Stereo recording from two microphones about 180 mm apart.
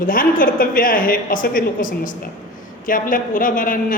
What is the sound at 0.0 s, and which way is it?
A woman's voice, 50° left (ahead or behind).